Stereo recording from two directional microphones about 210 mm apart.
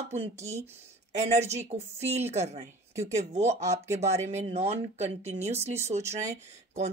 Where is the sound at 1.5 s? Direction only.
30° right (ahead or behind).